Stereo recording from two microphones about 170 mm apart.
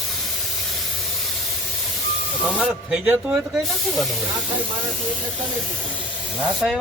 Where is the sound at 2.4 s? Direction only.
5° right (ahead or behind).